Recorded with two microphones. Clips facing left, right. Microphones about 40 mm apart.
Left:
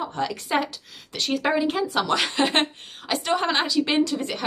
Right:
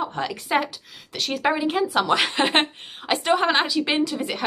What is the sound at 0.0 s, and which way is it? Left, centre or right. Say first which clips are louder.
A woman's voice: even; centre.